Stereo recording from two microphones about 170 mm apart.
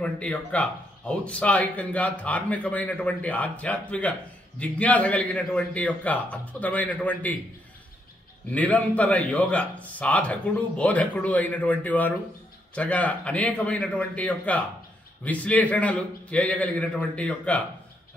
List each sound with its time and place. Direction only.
0.0 s speech: 5° left (ahead or behind)
8.5 s speech: 10° left (ahead or behind)